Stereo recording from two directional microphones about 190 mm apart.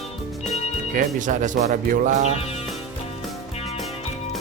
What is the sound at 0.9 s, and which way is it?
Speech, 45° right (ahead or behind).